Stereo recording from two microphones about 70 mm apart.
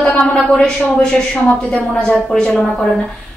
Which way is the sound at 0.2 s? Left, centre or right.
Centre.